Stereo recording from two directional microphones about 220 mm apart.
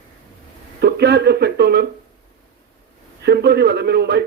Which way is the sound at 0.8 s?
50° right (ahead or behind).